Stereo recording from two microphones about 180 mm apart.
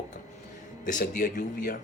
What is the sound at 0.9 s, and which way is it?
Speech, 45° left (ahead or behind).